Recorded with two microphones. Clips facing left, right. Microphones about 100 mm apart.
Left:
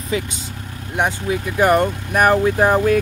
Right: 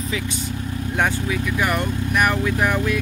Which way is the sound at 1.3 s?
40° left (ahead or behind).